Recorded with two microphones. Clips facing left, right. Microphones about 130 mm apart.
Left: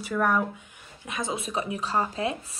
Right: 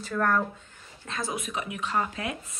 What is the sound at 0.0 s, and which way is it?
Speech, 10° left (ahead or behind).